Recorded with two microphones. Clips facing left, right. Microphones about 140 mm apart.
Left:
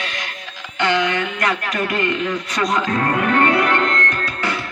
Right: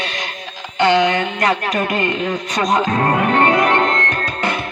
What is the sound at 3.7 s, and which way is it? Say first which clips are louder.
Music: right 3 dB; 20° right (ahead or behind).